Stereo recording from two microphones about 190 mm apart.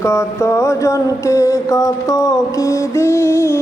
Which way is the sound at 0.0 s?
15° left (ahead or behind).